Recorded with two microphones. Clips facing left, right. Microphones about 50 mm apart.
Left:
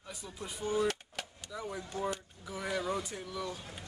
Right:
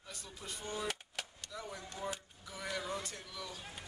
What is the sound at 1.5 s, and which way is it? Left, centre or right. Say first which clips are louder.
Speech: left 5 dB; centre.